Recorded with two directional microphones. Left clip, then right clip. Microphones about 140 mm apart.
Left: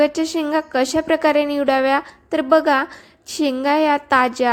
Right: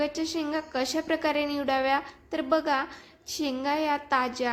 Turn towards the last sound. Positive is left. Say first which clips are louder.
# left 11 dB
turn(degrees=50)  # may be behind; listen again after turning